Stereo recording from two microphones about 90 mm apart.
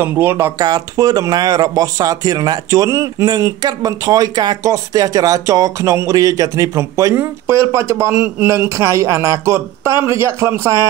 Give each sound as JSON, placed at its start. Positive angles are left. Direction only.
{"t": 0.0, "sound": "speech", "side_deg": -25}
{"t": 0.6, "sound": "speech", "side_deg": -45}